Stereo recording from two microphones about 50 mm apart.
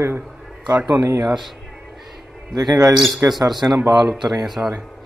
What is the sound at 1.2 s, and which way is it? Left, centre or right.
Music, centre.